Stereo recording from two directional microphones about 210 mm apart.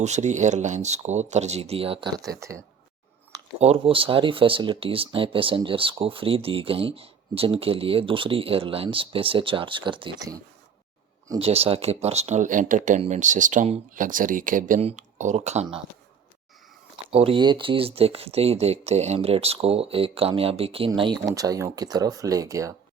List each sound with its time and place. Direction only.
0.0 s speech: 35° right (ahead or behind)
3.6 s speech: 25° right (ahead or behind)
11.3 s speech: 25° right (ahead or behind)
17.1 s speech: 25° right (ahead or behind)